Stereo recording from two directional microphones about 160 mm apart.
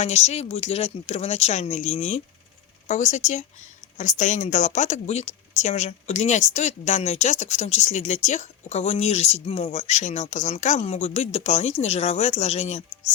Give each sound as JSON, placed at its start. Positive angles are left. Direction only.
{"t": 0.0, "sound": "speech", "side_deg": 45}